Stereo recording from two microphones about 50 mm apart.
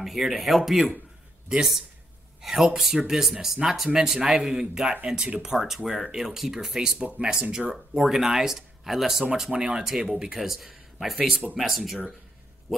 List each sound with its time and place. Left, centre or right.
0.0 s speech: centre
2.4 s speech: centre